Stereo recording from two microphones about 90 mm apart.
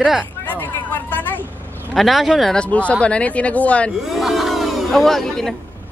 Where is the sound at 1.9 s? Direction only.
Centre (ahead or behind).